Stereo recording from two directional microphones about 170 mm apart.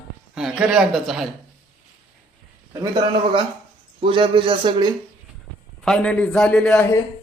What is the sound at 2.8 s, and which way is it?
A man's voice, 25° right (ahead or behind).